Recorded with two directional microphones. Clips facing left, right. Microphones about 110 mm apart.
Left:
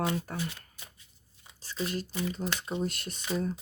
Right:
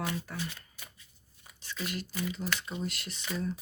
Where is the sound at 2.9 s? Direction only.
45° left (ahead or behind).